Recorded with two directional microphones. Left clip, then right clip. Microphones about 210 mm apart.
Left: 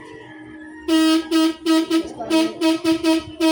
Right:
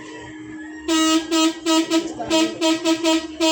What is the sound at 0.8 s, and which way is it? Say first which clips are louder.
Vehicle: left 1 dB; 5° left (ahead or behind).